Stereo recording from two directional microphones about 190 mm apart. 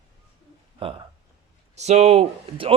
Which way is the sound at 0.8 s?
30° right (ahead or behind).